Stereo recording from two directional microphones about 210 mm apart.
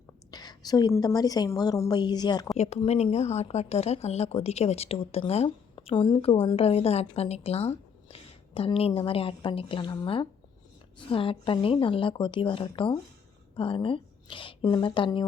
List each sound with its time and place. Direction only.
0.3 s speech: 20° left (ahead or behind)
2.6 s speech: 30° left (ahead or behind)